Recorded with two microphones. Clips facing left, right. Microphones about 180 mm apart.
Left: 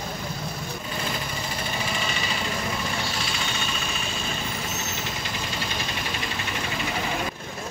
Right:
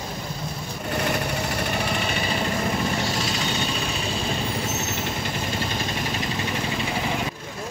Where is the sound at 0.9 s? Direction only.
70° right (ahead or behind).